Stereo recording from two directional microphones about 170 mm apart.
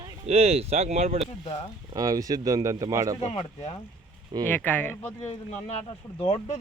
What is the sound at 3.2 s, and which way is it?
Speech, 35° left (ahead or behind).